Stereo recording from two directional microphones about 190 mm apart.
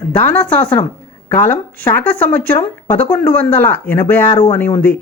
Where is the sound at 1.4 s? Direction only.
10° left (ahead or behind).